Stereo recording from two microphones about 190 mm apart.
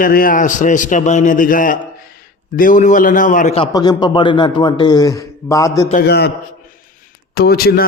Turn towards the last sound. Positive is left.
turn(degrees=50)  # may be behind; listen again after turning